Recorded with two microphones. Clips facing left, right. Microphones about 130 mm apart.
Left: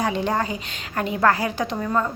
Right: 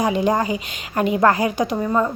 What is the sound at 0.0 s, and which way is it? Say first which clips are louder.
A woman's voice: right 4 dB; 10° right (ahead or behind).